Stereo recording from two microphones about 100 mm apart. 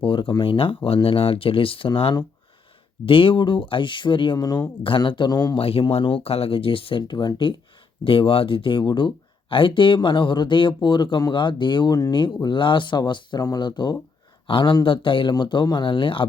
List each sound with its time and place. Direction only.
0.0 s speech: 55° left (ahead or behind)
3.1 s speech: 65° left (ahead or behind)
4.4 s speech: 40° left (ahead or behind)
4.9 s speech: 50° left (ahead or behind)
5.5 s speech: 70° left (ahead or behind); by 7.5 s 55° left (ahead or behind)
8.0 s speech: 65° left (ahead or behind)